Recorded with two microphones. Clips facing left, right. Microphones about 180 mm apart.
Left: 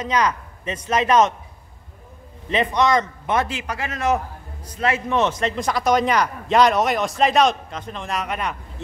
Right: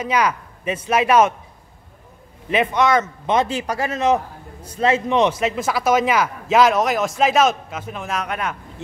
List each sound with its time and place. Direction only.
0.0 s speech: 10° right (ahead or behind)
2.5 s a man's voice: 5° right (ahead or behind)
3.4 s speech: 35° right (ahead or behind)
3.9 s a man's voice: 20° right (ahead or behind); by 8.8 s centre (ahead or behind)